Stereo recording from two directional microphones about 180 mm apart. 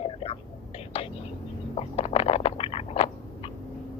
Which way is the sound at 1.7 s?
35° left (ahead or behind).